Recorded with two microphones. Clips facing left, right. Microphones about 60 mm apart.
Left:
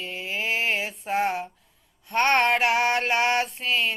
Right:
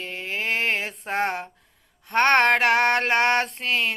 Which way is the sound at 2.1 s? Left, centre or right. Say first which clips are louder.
Right 3 dB; right.